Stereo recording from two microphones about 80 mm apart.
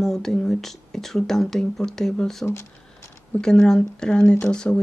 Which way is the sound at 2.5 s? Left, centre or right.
Left.